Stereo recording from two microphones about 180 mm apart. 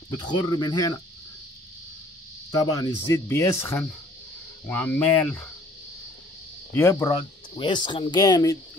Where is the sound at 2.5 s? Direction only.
20° left (ahead or behind).